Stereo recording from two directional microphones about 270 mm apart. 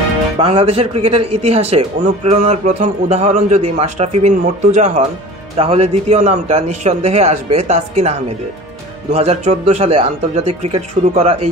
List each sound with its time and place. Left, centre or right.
0.4 s a man's voice: right
9.1 s a man's voice: right